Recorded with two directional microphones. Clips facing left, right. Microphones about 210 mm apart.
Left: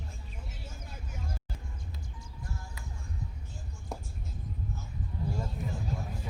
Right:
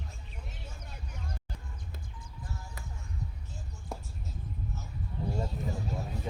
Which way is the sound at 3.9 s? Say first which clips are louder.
Left 1 dB; centre (ahead or behind).